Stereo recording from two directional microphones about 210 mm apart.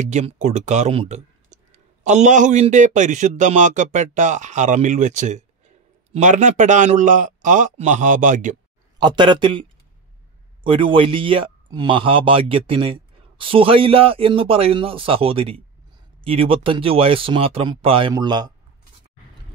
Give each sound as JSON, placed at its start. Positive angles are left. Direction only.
{"t": 0.0, "sound": "a man's voice", "side_deg": -35}
{"t": 8.9, "sound": "speech", "side_deg": -20}